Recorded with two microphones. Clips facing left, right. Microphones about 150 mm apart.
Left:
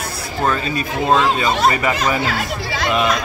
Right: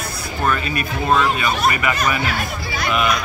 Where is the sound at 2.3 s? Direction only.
90° left.